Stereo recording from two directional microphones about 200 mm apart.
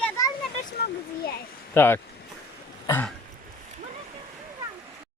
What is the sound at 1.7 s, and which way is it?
Speech, 10° left (ahead or behind).